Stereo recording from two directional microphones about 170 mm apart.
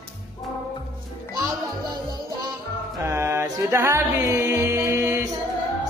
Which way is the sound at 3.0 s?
15° right (ahead or behind).